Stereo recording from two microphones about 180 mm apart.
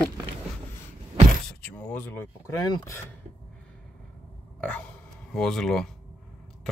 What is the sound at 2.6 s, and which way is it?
Speech, 20° left (ahead or behind).